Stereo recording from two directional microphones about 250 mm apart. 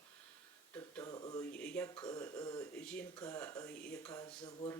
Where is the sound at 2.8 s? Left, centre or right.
Centre.